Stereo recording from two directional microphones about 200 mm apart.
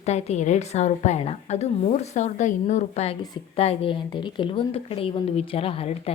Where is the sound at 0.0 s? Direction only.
35° left (ahead or behind).